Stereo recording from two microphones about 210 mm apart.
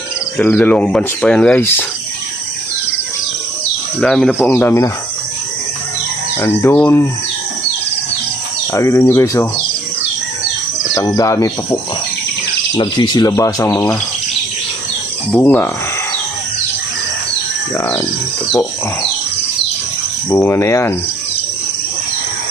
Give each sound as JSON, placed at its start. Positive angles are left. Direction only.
{"t": 0.3, "sound": "speech", "side_deg": 10}
{"t": 4.0, "sound": "speech", "side_deg": 5}
{"t": 6.4, "sound": "speech", "side_deg": 10}
{"t": 8.7, "sound": "speech", "side_deg": 15}
{"t": 10.9, "sound": "speech", "side_deg": 15}
{"t": 15.3, "sound": "speech", "side_deg": 10}
{"t": 20.3, "sound": "speech", "side_deg": 10}